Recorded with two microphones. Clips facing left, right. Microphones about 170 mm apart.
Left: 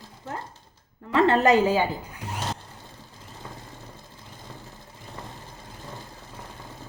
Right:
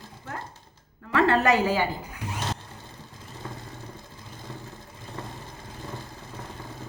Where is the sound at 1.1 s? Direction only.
20° left (ahead or behind).